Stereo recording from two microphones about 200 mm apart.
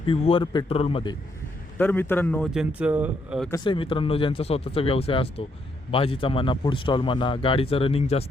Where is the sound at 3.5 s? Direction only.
25° left (ahead or behind).